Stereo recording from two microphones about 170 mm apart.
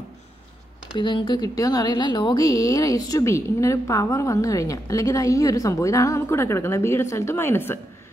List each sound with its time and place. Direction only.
0.9 s speech: 25° left (ahead or behind)